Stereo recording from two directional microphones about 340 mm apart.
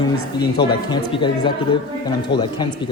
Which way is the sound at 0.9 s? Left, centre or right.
Centre.